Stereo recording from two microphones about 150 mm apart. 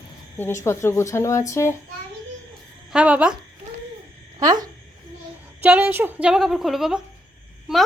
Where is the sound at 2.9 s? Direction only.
5° right (ahead or behind).